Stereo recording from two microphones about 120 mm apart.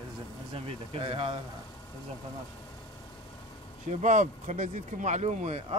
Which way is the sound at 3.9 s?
85° right.